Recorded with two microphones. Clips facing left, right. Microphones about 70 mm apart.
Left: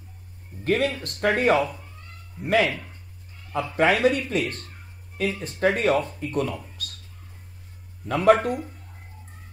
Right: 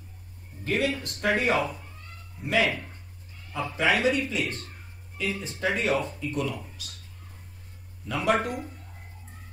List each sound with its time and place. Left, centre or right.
0.7 s speech: left
3.7 s speech: left
5.7 s speech: left
6.8 s a sound: left
8.1 s speech: left